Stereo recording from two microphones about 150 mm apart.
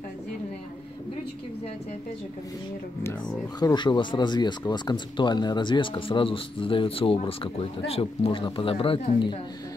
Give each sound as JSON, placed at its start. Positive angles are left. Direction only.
{"t": 3.0, "sound": "speech", "side_deg": 20}